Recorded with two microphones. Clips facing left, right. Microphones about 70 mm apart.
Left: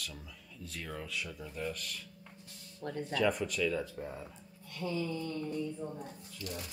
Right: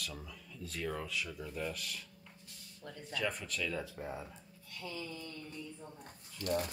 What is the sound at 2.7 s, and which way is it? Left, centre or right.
Speech, left.